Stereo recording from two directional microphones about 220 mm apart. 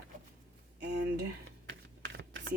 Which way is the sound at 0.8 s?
50° right (ahead or behind).